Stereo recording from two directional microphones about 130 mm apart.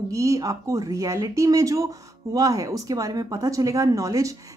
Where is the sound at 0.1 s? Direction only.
25° right (ahead or behind).